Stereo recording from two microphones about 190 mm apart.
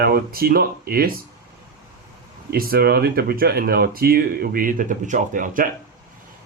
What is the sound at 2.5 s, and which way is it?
Speech, 50° right (ahead or behind).